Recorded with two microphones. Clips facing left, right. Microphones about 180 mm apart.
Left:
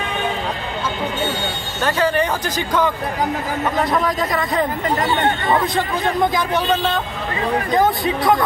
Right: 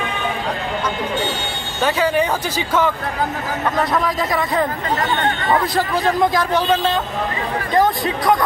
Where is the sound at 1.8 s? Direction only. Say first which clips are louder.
Right 1 dB; 10° right (ahead or behind).